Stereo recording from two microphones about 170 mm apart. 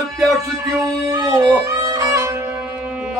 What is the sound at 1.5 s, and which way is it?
Violin, 20° right (ahead or behind).